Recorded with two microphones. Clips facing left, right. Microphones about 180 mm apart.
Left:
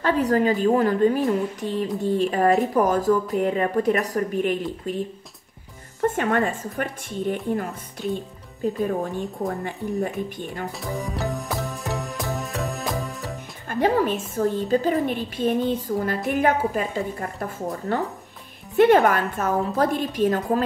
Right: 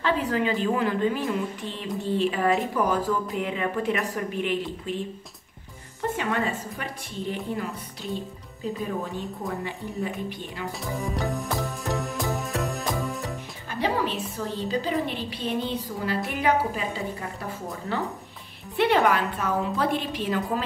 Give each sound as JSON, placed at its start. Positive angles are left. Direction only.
{"t": 0.0, "sound": "speech", "side_deg": 40}
{"t": 6.0, "sound": "speech", "side_deg": 50}
{"t": 8.8, "sound": "speech", "side_deg": 45}
{"t": 10.8, "sound": "music", "side_deg": 0}
{"t": 13.7, "sound": "speech", "side_deg": 50}